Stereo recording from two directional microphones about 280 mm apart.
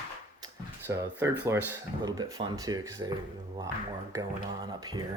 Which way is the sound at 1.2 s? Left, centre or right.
Centre.